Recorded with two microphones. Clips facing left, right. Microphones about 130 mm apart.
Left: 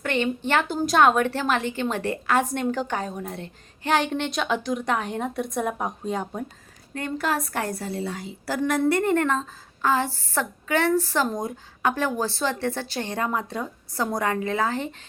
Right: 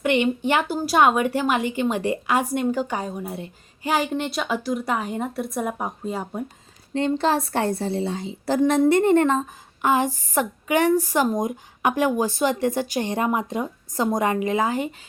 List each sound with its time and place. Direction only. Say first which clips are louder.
0.0 s a woman's voice: right 4 dB; 15° right (ahead or behind)
6.9 s a woman's voice: right 6 dB; 25° right (ahead or behind)